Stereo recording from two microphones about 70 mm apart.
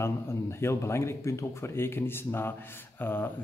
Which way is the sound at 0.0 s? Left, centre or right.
Left.